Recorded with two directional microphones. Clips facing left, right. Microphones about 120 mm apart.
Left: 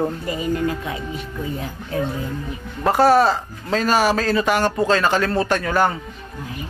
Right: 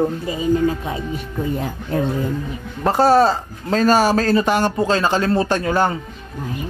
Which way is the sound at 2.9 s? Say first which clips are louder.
Right 1 dB; 30° right (ahead or behind).